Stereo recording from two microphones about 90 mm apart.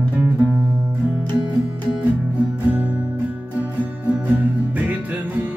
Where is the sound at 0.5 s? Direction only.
5° right (ahead or behind).